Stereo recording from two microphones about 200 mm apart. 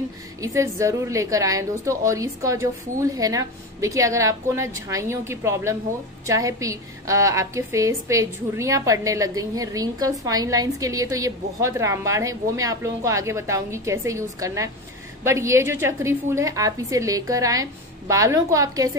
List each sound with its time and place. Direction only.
0.4 s a woman's voice: 15° right (ahead or behind)